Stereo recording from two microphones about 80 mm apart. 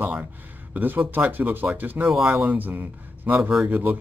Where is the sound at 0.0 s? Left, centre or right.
Right.